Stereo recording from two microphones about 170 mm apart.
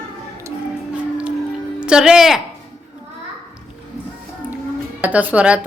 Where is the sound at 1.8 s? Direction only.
5° right (ahead or behind).